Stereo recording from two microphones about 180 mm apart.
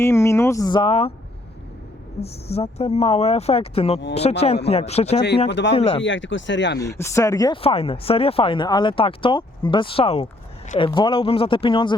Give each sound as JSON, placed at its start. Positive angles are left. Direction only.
{"t": 0.0, "sound": "speech", "side_deg": 15}
{"t": 2.2, "sound": "speech", "side_deg": 35}
{"t": 5.5, "sound": "speech", "side_deg": 80}
{"t": 5.7, "sound": "speech", "side_deg": 35}
{"t": 6.0, "sound": "speech", "side_deg": 90}
{"t": 6.7, "sound": "speech", "side_deg": 15}